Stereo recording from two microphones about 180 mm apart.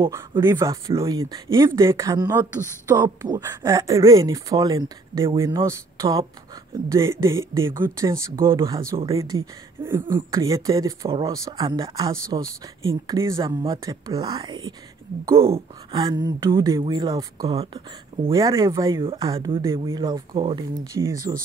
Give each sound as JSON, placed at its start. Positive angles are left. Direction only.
{"t": 0.4, "sound": "speech", "side_deg": -15}